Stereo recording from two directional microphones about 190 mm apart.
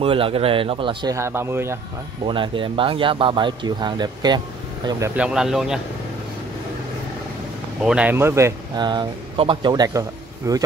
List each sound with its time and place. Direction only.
0.0 s speech: 30° right (ahead or behind)
1.1 s speech: 15° right (ahead or behind)
2.2 s speech: 25° right (ahead or behind)
5.1 s speech: 5° right (ahead or behind)
7.8 s speech: 5° right (ahead or behind)